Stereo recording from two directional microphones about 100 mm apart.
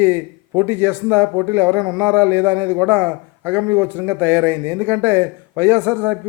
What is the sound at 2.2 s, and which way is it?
A man's voice, 20° right (ahead or behind).